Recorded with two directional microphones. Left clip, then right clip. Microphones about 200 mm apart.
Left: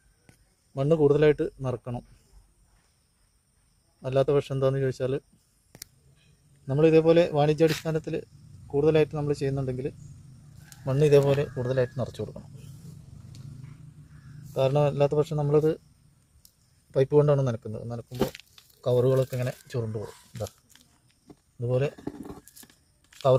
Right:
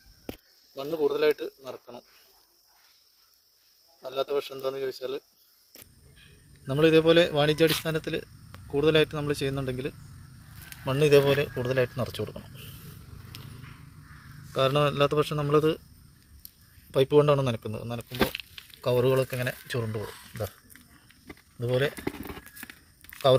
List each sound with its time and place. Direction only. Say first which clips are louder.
0.8 s speech: left 5 dB; centre (ahead or behind)
4.0 s speech: left 5 dB; centre (ahead or behind)
6.7 s speech: left 1 dB; 5° right (ahead or behind)
14.5 s speech: even; 15° right (ahead or behind)
16.9 s speech: right 1 dB; 5° right (ahead or behind)
21.6 s speech: right 1 dB; 10° right (ahead or behind)
22.0 s a sound: right 3 dB; 50° right (ahead or behind)